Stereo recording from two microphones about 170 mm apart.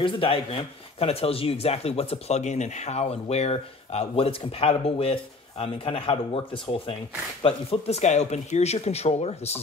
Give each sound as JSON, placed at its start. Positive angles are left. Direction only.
{"t": 0.0, "sound": "speech", "side_deg": 30}